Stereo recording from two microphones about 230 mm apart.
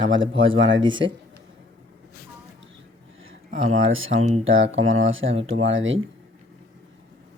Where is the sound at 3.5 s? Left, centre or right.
Right.